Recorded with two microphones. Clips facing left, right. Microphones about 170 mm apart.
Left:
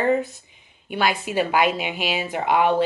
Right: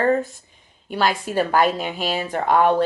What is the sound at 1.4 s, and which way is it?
Speech, 40° right (ahead or behind).